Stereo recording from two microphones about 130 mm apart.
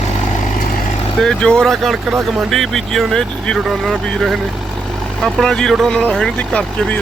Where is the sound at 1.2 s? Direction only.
5° left (ahead or behind).